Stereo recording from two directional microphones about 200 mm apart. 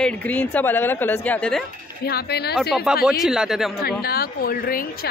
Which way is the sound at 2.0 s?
50° left (ahead or behind).